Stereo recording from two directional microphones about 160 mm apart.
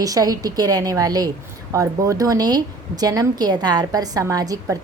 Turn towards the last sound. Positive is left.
turn(degrees=-20)  # may be behind; listen again after turning